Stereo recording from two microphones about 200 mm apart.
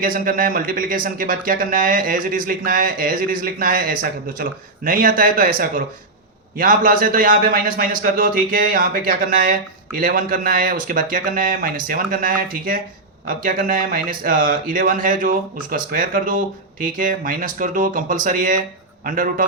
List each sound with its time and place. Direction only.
0.0 s speech: 45° right (ahead or behind)